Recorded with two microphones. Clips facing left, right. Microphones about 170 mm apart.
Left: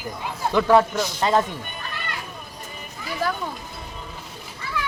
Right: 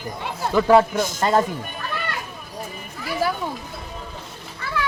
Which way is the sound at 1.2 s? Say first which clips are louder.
Right 1 dB; centre (ahead or behind).